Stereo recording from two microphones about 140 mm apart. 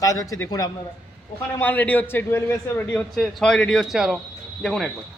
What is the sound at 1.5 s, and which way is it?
A man's voice, 15° left (ahead or behind).